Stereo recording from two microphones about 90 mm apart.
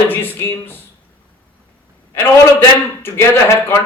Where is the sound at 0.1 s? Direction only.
25° left (ahead or behind).